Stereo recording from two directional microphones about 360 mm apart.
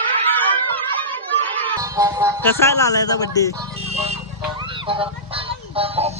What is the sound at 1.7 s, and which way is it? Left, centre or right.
Music, centre.